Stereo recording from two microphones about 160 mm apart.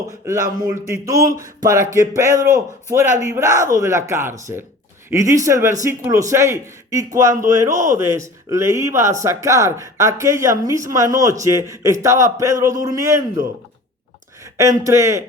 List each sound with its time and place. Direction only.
0.7 s speech: 20° right (ahead or behind)
7.7 s speech: 50° right (ahead or behind)
7.9 s speech: 20° right (ahead or behind)
14.6 s speech: 20° right (ahead or behind)